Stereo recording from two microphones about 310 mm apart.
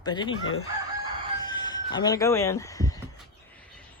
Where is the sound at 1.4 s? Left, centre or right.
Centre.